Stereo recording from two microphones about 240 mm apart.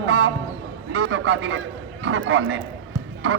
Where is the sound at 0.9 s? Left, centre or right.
Right.